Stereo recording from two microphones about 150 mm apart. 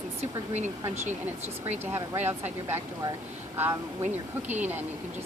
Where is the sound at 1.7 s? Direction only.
15° right (ahead or behind).